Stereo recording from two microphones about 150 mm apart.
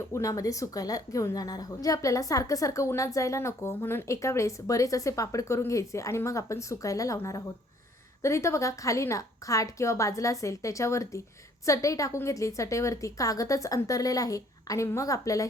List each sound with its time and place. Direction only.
0.1 s a woman's voice: 20° left (ahead or behind)